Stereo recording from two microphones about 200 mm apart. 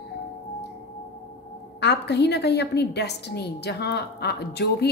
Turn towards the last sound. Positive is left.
turn(degrees=55)  # may be behind; listen again after turning